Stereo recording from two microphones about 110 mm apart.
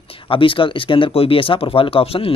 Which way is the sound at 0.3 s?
50° left (ahead or behind).